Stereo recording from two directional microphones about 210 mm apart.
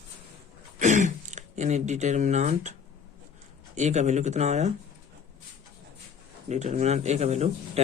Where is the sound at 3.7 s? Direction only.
35° right (ahead or behind).